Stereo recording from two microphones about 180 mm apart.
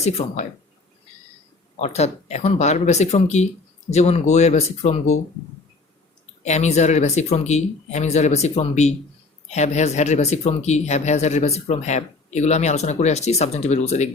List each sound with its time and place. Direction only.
0.0 s speech: 35° left (ahead or behind)
1.7 s speech: 35° left (ahead or behind)
6.4 s speech: 40° left (ahead or behind)